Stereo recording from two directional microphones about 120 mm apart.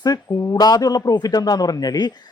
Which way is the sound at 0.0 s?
30° left (ahead or behind).